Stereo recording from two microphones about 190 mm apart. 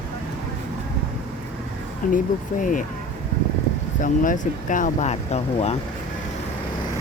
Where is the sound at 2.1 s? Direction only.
45° left (ahead or behind).